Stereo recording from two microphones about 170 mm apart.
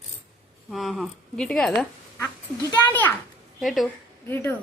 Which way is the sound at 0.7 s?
Centre (ahead or behind).